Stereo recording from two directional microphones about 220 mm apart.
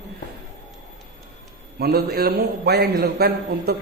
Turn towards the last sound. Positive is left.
turn(degrees=-45)  # may be behind; listen again after turning